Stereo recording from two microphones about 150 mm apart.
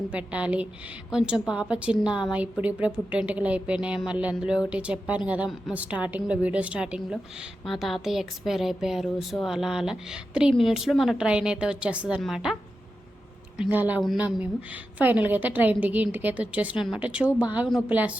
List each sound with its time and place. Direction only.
0.1 s a woman's voice: 10° right (ahead or behind)
13.6 s a woman's voice: 10° right (ahead or behind)